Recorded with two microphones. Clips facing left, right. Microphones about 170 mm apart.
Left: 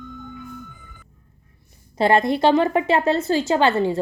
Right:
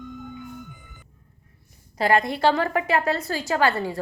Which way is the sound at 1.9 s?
25° left (ahead or behind).